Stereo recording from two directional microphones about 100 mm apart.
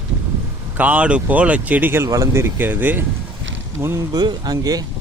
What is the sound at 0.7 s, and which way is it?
A man's voice, 15° right (ahead or behind).